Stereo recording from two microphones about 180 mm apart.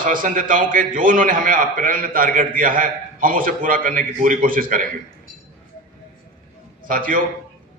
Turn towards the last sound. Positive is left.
turn(degrees=-50)  # may be behind; listen again after turning